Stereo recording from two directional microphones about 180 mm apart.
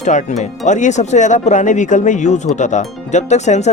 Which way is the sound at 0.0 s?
45° left (ahead or behind).